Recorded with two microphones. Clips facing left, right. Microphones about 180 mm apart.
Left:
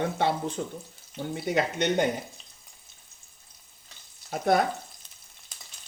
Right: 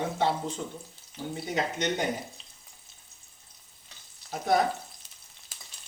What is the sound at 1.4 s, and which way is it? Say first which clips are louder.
Speech: left 4 dB; 60° left (ahead or behind).